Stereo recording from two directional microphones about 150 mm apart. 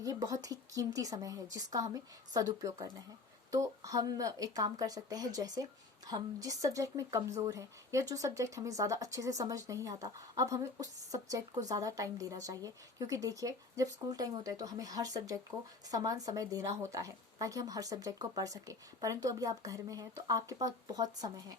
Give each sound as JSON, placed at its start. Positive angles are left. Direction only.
{"t": 0.0, "sound": "speech", "side_deg": -25}